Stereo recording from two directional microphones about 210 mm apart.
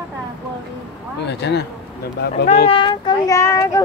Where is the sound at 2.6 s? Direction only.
25° left (ahead or behind).